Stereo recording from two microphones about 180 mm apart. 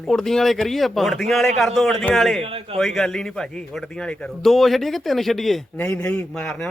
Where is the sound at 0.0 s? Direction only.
5° left (ahead or behind).